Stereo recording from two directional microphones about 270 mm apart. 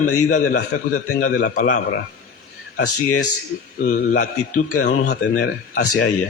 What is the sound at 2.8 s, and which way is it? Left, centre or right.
Speech, left.